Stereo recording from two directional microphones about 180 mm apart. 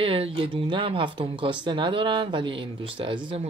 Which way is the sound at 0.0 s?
30° right (ahead or behind).